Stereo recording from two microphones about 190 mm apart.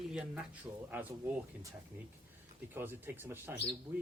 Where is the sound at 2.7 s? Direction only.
10° right (ahead or behind).